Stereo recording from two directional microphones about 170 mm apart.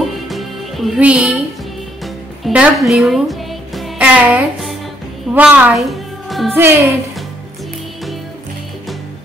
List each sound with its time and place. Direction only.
0.0 s music: centre (ahead or behind)
2.4 s music: 5° right (ahead or behind)
5.3 s a woman's voice: 10° right (ahead or behind)
6.5 s speech: 15° right (ahead or behind)